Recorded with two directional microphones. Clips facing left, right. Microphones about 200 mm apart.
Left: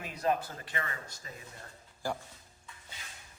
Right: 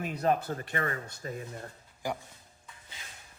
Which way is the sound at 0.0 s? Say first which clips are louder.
Right 3 dB; 50° right (ahead or behind).